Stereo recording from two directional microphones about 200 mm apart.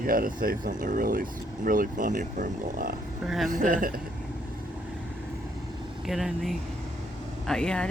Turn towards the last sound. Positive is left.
turn(degrees=5)  # may be behind; listen again after turning